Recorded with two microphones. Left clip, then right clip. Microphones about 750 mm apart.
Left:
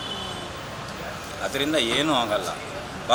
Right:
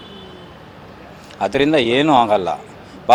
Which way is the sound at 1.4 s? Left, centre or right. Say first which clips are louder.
Right 9 dB; right.